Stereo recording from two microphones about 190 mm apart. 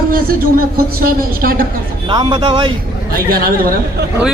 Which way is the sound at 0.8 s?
50° right (ahead or behind).